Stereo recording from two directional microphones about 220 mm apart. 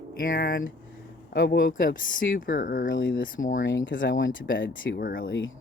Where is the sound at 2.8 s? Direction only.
55° left (ahead or behind).